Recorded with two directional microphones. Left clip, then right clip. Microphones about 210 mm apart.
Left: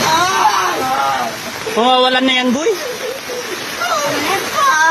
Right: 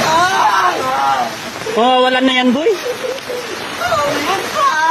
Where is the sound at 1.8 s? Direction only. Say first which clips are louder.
Even; 15° right (ahead or behind).